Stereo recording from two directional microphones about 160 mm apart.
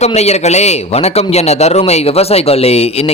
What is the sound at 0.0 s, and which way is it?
A man's voice, 40° left (ahead or behind).